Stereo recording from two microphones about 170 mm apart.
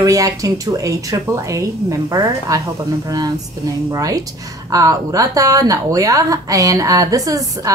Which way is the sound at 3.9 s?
20° right (ahead or behind).